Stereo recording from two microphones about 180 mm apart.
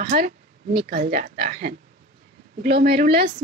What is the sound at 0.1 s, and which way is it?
Speech, 50° right (ahead or behind).